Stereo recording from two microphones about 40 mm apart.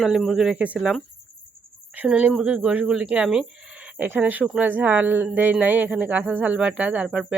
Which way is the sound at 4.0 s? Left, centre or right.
Right.